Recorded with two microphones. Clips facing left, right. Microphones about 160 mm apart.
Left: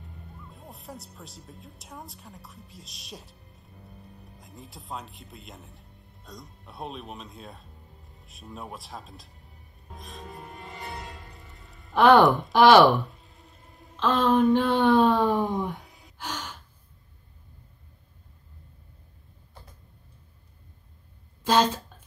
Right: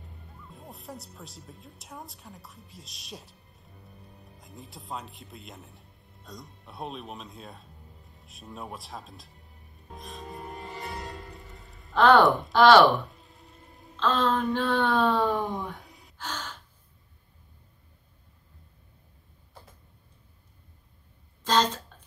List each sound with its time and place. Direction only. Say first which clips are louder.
0.0 s speech: left 3 dB; centre (ahead or behind)
9.9 s music: right 2 dB; centre (ahead or behind)
10.4 s music: right 2 dB; 40° right (ahead or behind)
11.1 s music: right 4 dB; centre (ahead or behind)
11.9 s speech: left 2 dB; 15° left (ahead or behind)
12.9 s a sound: left 2 dB; centre (ahead or behind)
13.9 s speech: left 4 dB; 10° left (ahead or behind)
16.2 s gasp: left 1 dB; 10° left (ahead or behind)